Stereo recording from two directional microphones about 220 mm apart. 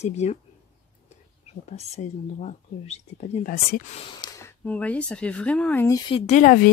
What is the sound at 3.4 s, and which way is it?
Speech, 35° left (ahead or behind).